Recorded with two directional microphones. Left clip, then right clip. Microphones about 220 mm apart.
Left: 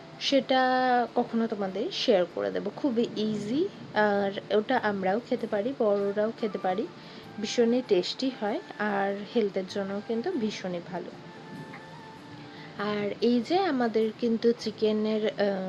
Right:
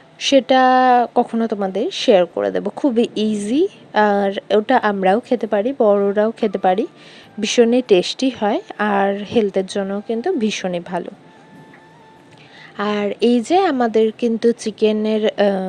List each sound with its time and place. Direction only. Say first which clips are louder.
0.2 s speech: right 11 dB; 35° right (ahead or behind)
12.7 s speech: right 10 dB; 40° right (ahead or behind)